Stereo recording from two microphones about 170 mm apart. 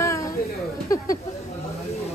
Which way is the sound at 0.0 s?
15° left (ahead or behind).